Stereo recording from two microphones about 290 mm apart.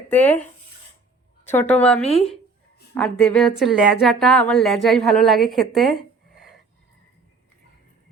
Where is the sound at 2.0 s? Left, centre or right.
Left.